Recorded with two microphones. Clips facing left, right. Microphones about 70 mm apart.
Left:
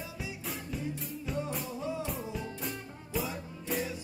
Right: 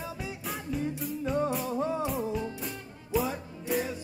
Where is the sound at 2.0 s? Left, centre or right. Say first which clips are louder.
Right 6 dB; centre.